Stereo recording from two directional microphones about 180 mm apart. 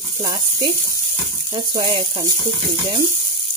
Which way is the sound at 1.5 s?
25° right (ahead or behind).